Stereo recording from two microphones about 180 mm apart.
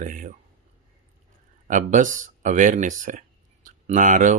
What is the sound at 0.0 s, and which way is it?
Speech, 45° right (ahead or behind).